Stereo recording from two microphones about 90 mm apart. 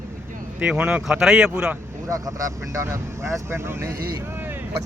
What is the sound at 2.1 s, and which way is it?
Speech, 40° right (ahead or behind).